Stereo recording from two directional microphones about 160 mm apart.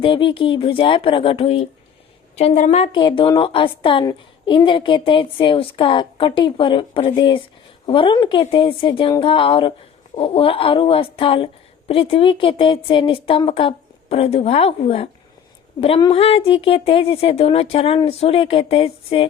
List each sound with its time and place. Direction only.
0.0 s speech: 35° left (ahead or behind)